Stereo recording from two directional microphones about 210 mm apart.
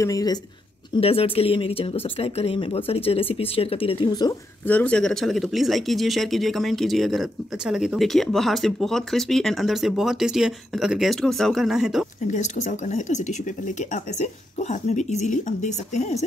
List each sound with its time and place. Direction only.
0.0 s speech: 15° left (ahead or behind)
4.6 s speech: 5° left (ahead or behind)
12.3 s speech: 35° left (ahead or behind)